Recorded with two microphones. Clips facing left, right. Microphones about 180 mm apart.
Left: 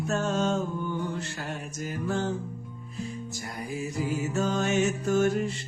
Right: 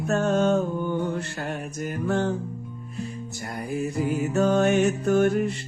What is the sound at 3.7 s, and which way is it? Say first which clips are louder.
Music: right 5 dB; 55° right (ahead or behind).